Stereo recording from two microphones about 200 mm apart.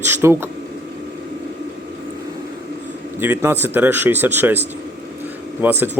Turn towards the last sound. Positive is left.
turn(degrees=-10)  # may be behind; listen again after turning